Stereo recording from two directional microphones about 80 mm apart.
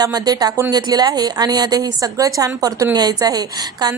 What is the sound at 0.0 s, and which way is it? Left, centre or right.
A woman's voice, right.